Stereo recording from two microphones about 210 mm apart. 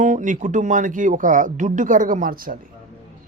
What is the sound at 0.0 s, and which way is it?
Speech, 40° right (ahead or behind).